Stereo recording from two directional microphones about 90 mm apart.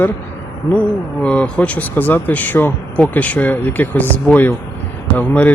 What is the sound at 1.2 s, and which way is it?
Speech, 10° left (ahead or behind).